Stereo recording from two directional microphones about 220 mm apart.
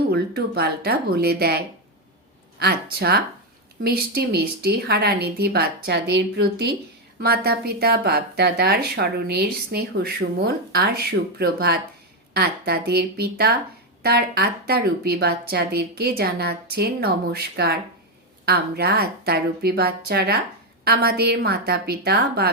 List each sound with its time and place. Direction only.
0.0 s speech: 45° right (ahead or behind)